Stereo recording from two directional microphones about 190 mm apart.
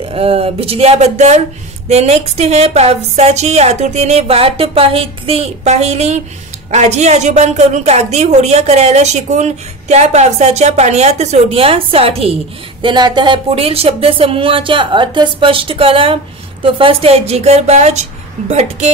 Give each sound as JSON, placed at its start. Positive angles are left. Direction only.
{"t": 0.1, "sound": "a woman's voice", "side_deg": -30}